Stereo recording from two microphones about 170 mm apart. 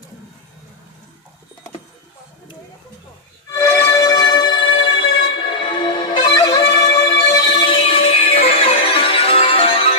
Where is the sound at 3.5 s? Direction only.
15° left (ahead or behind).